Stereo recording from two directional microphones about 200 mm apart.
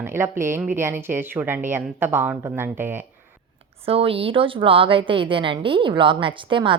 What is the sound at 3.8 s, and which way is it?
A woman's voice, 30° right (ahead or behind).